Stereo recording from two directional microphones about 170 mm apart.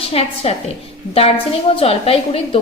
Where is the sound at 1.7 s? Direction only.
35° left (ahead or behind).